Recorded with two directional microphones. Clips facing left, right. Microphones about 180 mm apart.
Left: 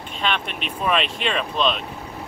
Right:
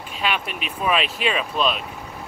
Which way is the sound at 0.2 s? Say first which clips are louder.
Even; 5° right (ahead or behind).